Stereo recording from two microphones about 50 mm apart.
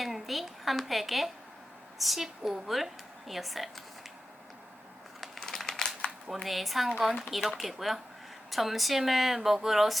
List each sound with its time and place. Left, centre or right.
0.0 s a woman's voice: centre
5.4 s crumpling: centre
6.1 s a sound: centre
6.4 s a woman's voice: centre